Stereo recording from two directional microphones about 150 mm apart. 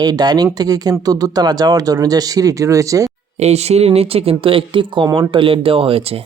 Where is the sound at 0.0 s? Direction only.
25° right (ahead or behind).